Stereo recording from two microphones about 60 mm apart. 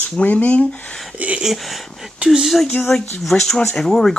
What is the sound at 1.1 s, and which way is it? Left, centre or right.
Speech, right.